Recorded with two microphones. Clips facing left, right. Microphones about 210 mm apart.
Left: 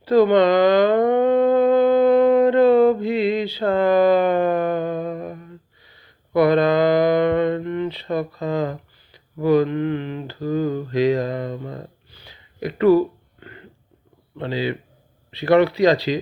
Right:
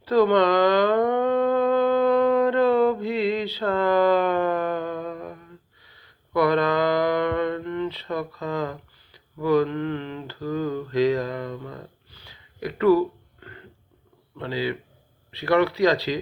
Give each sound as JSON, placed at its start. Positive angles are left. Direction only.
{"t": 0.0, "sound": "a sound", "side_deg": 15}
{"t": 8.4, "sound": "mantra", "side_deg": 15}
{"t": 11.3, "sound": "speech", "side_deg": 25}
{"t": 12.2, "sound": "a sound", "side_deg": 20}
{"t": 14.3, "sound": "speech", "side_deg": 20}
{"t": 15.3, "sound": "mantra", "side_deg": 20}